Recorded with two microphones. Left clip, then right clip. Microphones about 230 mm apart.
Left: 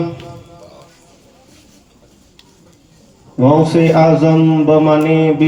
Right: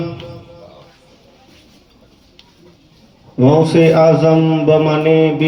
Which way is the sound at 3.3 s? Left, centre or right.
Right.